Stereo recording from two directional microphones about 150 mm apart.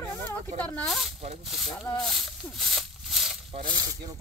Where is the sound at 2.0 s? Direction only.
Centre (ahead or behind).